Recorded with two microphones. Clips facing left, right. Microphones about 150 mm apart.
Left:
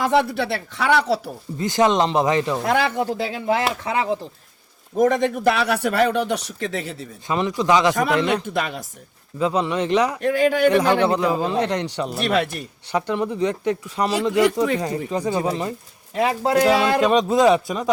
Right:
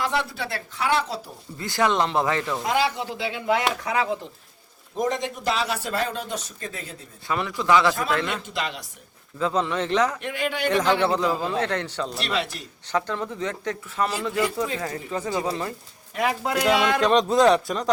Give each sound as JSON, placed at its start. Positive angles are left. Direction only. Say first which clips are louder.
{"t": 0.0, "sound": "a man's voice", "louder": "left 7 dB", "side_deg": 60}
{"t": 1.5, "sound": "speech", "louder": "left 5 dB", "side_deg": 20}
{"t": 2.6, "sound": "speech", "louder": "left 4 dB", "side_deg": 55}
{"t": 4.9, "sound": "a man's voice", "louder": "left 8 dB", "side_deg": 55}
{"t": 7.3, "sound": "speech", "louder": "left 3 dB", "side_deg": 20}
{"t": 8.3, "sound": "speech", "louder": "left 7 dB", "side_deg": 55}
{"t": 9.4, "sound": "speech", "louder": "left 3 dB", "side_deg": 15}
{"t": 10.2, "sound": "speech", "louder": "left 10 dB", "side_deg": 40}
{"t": 10.7, "sound": "speech", "louder": "left 4 dB", "side_deg": 10}
{"t": 12.1, "sound": "speech", "louder": "left 9 dB", "side_deg": 50}
{"t": 12.9, "sound": "speech", "louder": "left 4 dB", "side_deg": 15}
{"t": 16.1, "sound": "speech", "louder": "left 6 dB", "side_deg": 30}
{"t": 17.0, "sound": "a man's voice", "louder": "left 2 dB", "side_deg": 5}